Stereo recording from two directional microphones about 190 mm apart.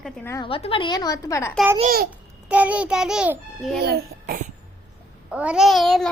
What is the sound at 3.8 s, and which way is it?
Speech, 55° right (ahead or behind).